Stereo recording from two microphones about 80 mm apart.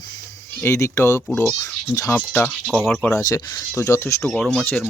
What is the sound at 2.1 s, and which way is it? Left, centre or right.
Speech, left.